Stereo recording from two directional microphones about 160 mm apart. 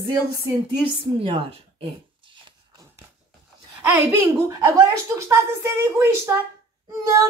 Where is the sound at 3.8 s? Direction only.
15° right (ahead or behind).